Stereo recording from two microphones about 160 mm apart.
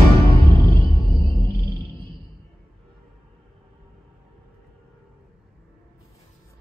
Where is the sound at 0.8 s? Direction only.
35° right (ahead or behind).